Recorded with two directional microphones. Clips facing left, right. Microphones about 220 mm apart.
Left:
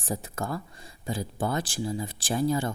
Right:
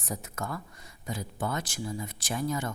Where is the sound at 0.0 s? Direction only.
30° left (ahead or behind).